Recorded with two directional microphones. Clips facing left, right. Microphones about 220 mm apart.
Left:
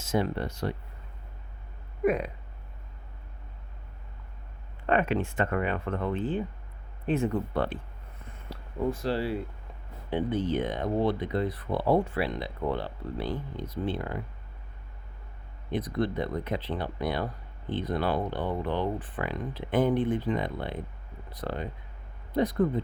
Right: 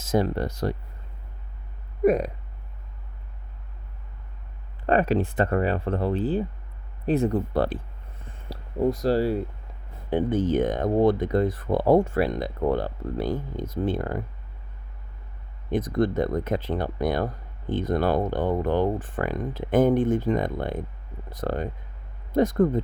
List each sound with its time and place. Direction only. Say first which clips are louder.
0.1 s speech: right 4 dB; 40° right (ahead or behind)
2.0 s speech: right 5 dB; 40° right (ahead or behind)
4.9 s speech: right 4 dB; 35° right (ahead or behind)
15.7 s speech: right 6 dB; 45° right (ahead or behind)